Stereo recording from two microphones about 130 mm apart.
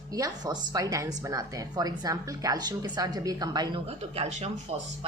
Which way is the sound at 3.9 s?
55° right (ahead or behind).